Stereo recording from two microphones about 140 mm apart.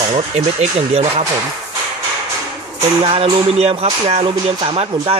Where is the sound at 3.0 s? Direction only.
40° right (ahead or behind).